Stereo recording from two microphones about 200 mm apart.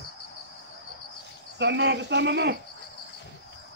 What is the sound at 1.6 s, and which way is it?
Speech, 60° right (ahead or behind).